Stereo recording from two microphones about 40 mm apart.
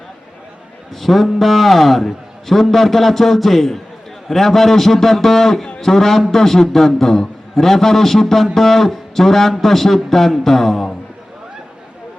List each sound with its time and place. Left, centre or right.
1.0 s a man's voice: centre